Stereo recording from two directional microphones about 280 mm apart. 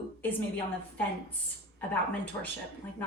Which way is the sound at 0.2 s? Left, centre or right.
Centre.